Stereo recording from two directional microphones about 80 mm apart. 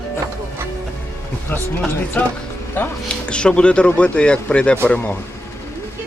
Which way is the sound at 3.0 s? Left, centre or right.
Centre.